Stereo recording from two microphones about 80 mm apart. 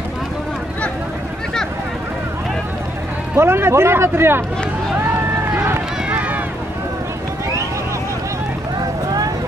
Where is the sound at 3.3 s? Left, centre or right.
Right.